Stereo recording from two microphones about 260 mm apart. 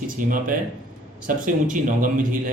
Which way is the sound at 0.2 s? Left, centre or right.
Right.